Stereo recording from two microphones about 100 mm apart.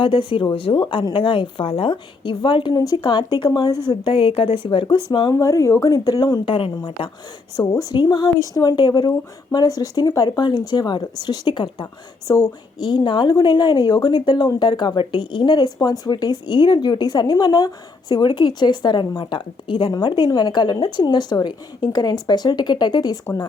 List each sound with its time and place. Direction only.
0.0 s a woman's voice: 55° left (ahead or behind)
2.7 s a woman's voice: 40° left (ahead or behind)
3.8 s a woman's voice: 60° left (ahead or behind)
5.3 s a woman's voice: 35° left (ahead or behind)
6.4 s a woman's voice: 60° left (ahead or behind)
7.5 s a woman's voice: 40° left (ahead or behind)
12.3 s a woman's voice: 40° left (ahead or behind)